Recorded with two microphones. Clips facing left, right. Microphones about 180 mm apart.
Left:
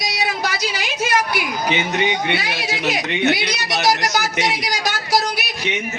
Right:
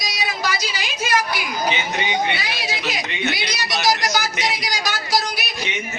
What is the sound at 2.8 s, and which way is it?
A man's voice, 65° left (ahead or behind).